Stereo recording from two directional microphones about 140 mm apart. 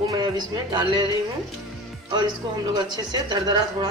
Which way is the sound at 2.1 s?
30° right (ahead or behind).